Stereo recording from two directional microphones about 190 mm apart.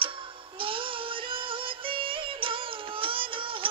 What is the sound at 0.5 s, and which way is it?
Synthetic singing, 25° right (ahead or behind).